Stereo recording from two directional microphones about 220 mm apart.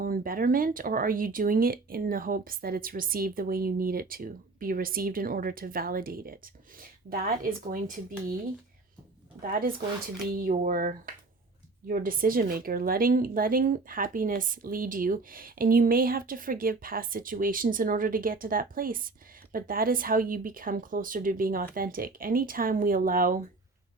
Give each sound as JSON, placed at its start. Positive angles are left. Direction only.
{"t": 0.0, "sound": "a woman's voice", "side_deg": -40}
{"t": 9.4, "sound": "a woman's voice", "side_deg": -40}